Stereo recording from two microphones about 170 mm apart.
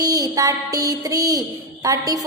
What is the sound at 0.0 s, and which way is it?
Child singing, 20° right (ahead or behind).